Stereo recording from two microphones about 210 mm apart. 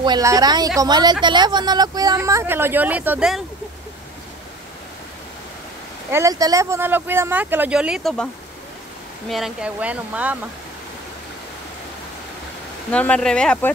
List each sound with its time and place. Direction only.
0.0 s a woman's voice: 20° right (ahead or behind)
6.1 s speech: 15° right (ahead or behind); by 8.3 s centre (ahead or behind)
9.3 s speech: centre (ahead or behind)
12.9 s speech: 5° left (ahead or behind)